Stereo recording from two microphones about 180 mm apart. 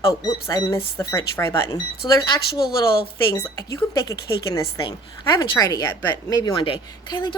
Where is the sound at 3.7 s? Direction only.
20° left (ahead or behind).